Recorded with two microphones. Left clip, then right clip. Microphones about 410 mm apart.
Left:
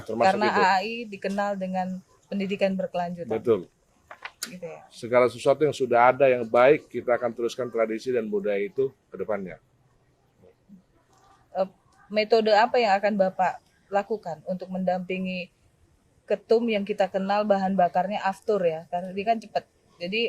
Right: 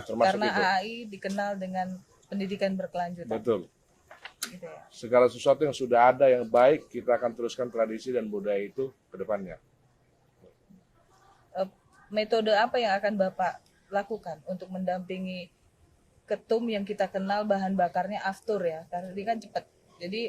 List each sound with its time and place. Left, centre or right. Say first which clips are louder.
0.2 s a man's voice: left 4 dB; left
3.3 s speech: left 5 dB; left
4.9 s speech: left 1 dB; left
12.1 s a man's voice: left 5 dB; left